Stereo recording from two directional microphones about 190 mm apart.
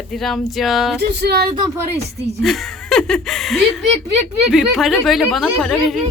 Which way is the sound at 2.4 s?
Centre (ahead or behind).